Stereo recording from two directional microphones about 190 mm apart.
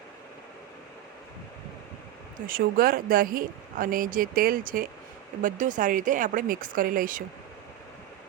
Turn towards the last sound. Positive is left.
turn(degrees=-45)  # may be behind; listen again after turning